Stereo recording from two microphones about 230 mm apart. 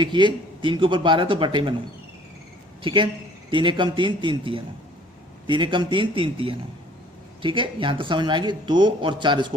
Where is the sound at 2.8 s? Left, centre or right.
Right.